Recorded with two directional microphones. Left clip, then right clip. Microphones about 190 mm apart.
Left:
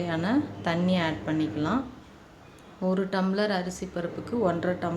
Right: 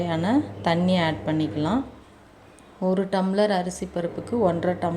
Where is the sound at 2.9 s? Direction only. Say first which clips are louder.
Right 4 dB; 20° right (ahead or behind).